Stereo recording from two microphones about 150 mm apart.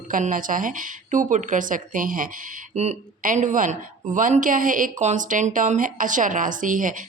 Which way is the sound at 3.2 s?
60° right (ahead or behind).